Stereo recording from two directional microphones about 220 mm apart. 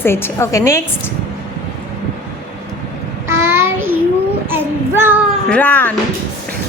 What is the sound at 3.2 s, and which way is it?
Child singing, 10° right (ahead or behind).